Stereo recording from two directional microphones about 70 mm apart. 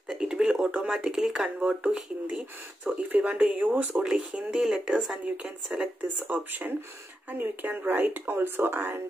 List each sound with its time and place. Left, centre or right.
0.1 s speech: centre
4.0 s speech: centre; by 9.0 s right